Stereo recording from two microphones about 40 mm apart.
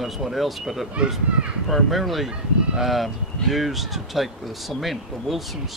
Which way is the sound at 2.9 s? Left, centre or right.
Centre.